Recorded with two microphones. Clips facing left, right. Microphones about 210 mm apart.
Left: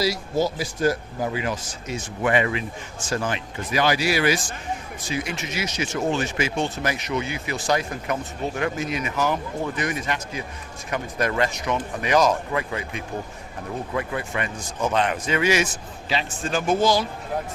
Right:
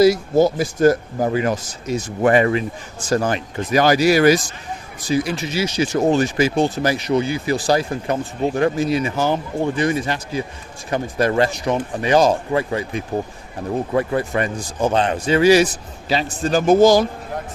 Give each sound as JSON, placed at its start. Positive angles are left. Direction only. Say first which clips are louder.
{"t": 0.0, "sound": "speech", "louder": "right 9 dB", "side_deg": -50}